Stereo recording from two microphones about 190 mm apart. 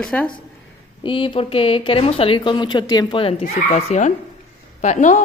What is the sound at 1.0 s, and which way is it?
A woman's voice, 25° left (ahead or behind).